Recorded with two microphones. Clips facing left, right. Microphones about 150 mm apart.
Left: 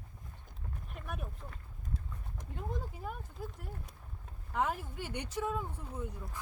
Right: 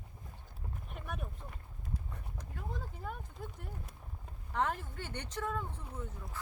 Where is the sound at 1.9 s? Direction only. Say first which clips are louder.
Even; 20° left (ahead or behind).